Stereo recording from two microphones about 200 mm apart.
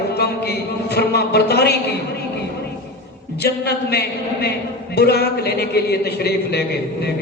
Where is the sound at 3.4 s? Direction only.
55° left (ahead or behind).